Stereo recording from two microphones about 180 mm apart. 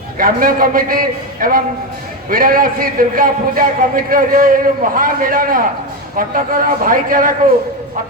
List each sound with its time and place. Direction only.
0.2 s a man's voice: 55° right (ahead or behind)